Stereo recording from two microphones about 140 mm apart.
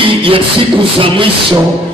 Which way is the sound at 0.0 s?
40° right (ahead or behind).